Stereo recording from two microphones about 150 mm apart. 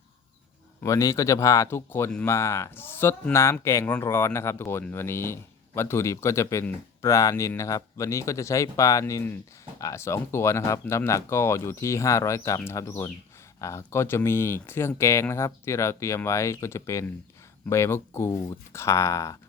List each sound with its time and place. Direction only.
0.8 s speech: 20° left (ahead or behind)